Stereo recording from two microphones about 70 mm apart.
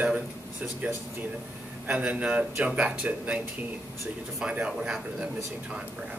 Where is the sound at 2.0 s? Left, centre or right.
Right.